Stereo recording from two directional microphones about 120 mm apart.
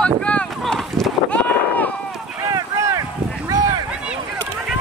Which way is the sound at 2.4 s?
25° right (ahead or behind).